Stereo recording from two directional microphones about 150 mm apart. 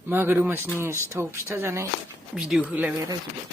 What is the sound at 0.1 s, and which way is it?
Speech, 15° right (ahead or behind).